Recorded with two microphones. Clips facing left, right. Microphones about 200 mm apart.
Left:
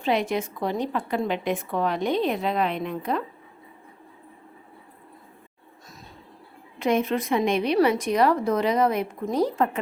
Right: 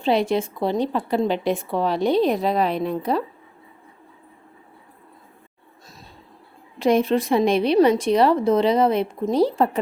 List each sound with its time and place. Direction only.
0.0 s a woman's voice: 30° right (ahead or behind)
6.7 s a woman's voice: 30° right (ahead or behind)